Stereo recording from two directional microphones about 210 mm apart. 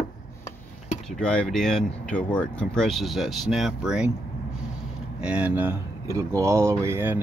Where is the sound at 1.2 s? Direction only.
5° left (ahead or behind).